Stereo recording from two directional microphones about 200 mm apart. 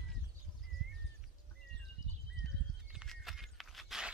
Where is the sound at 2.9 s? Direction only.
Centre (ahead or behind).